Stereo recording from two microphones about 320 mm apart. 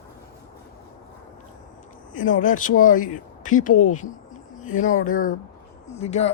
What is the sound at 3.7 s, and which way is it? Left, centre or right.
Speech, left.